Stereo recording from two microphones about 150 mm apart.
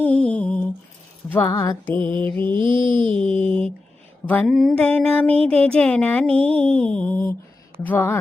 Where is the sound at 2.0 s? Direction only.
10° left (ahead or behind).